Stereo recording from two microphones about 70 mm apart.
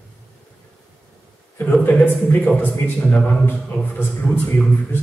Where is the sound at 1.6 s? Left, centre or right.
Left.